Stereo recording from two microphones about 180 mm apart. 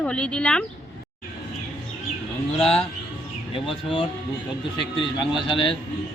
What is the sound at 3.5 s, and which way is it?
Speech, 30° left (ahead or behind).